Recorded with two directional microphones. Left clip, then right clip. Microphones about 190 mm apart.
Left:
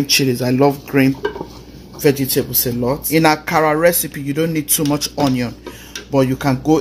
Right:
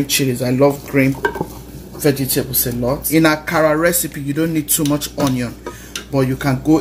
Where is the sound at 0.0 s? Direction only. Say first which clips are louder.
Left 2 dB; 40° left (ahead or behind).